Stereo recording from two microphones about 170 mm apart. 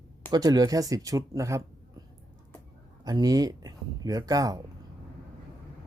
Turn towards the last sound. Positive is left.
turn(degrees=-20)  # may be behind; listen again after turning